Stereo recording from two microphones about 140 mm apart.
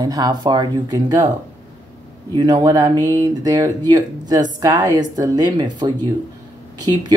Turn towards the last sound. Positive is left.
turn(degrees=-30)  # may be behind; listen again after turning